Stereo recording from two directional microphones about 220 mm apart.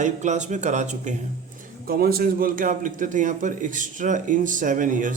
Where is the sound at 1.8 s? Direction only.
45° right (ahead or behind).